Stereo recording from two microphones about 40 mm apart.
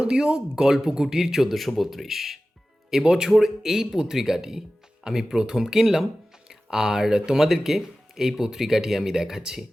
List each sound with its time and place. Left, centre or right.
0.1 s speech: centre
2.9 s speech: centre